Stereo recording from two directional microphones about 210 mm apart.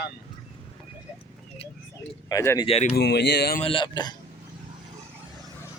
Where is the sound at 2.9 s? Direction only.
50° left (ahead or behind).